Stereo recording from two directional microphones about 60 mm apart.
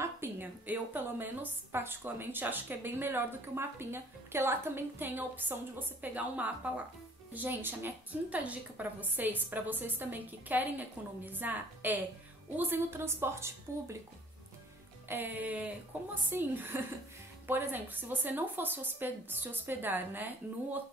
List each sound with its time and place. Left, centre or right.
0.0 s a woman's voice: right
7.3 s a woman's voice: right
15.0 s a woman's voice: right
16.3 s a woman's voice: right